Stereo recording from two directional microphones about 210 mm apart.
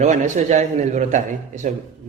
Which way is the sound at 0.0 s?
35° right (ahead or behind).